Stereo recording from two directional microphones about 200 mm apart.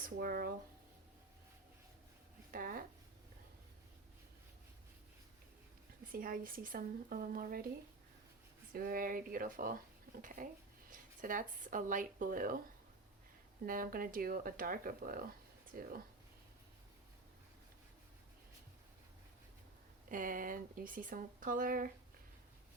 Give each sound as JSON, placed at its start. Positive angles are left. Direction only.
{"t": 0.0, "sound": "speech", "side_deg": -45}
{"t": 2.5, "sound": "speech", "side_deg": -45}
{"t": 6.1, "sound": "speech", "side_deg": -45}
{"t": 8.7, "sound": "speech", "side_deg": -45}
{"t": 13.7, "sound": "speech", "side_deg": -45}
{"t": 20.1, "sound": "speech", "side_deg": -40}